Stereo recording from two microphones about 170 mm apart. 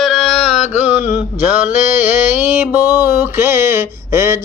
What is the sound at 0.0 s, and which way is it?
Music, centre (ahead or behind).